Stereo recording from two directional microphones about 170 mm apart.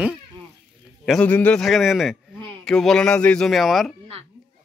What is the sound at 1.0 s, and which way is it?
A man's voice, 5° left (ahead or behind).